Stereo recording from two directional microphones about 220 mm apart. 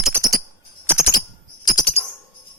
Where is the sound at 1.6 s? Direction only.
20° left (ahead or behind).